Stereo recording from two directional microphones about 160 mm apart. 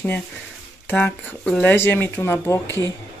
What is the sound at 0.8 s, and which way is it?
Speech, 10° left (ahead or behind).